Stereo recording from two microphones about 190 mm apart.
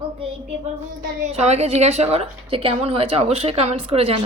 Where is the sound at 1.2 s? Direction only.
35° right (ahead or behind).